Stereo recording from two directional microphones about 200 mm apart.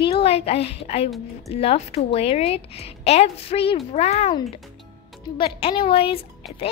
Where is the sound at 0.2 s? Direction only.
30° left (ahead or behind).